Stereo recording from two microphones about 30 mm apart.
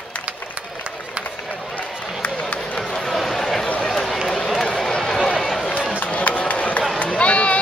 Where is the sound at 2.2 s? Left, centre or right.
Left.